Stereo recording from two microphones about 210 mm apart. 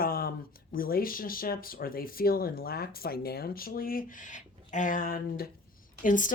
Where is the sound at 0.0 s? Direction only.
45° left (ahead or behind).